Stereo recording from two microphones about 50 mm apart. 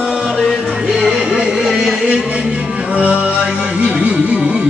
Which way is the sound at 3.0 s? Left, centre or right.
Right.